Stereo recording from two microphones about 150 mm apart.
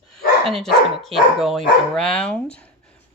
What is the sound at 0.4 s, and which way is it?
Speech, centre (ahead or behind).